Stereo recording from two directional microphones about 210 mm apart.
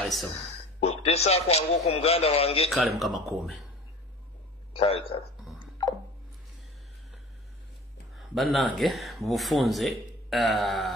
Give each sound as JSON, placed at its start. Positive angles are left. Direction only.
{"t": 0.0, "sound": "speech", "side_deg": 0}
{"t": 0.5, "sound": "a man's voice", "side_deg": 30}
{"t": 3.0, "sound": "speech", "side_deg": 0}
{"t": 4.7, "sound": "speech", "side_deg": 25}
{"t": 5.6, "sound": "a sound", "side_deg": 20}
{"t": 8.2, "sound": "speech", "side_deg": 0}